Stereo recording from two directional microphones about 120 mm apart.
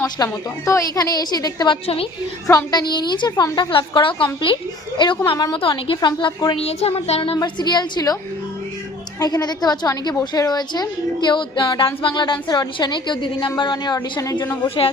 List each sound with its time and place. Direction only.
0.2 s a woman's voice: 30° left (ahead or behind)
6.6 s music: 60° left (ahead or behind)
7.3 s a woman's voice: 35° left (ahead or behind)
9.2 s a woman's voice: 35° left (ahead or behind)